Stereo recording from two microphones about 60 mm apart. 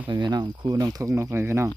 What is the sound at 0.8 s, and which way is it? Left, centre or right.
Speech, right.